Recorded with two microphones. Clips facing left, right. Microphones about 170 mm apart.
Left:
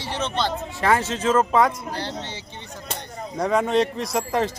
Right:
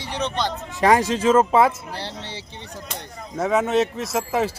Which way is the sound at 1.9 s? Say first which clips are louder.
Left 2 dB; 30° right (ahead or behind).